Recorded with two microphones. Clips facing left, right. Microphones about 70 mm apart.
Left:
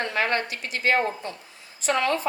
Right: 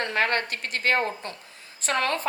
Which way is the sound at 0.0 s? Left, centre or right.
Right.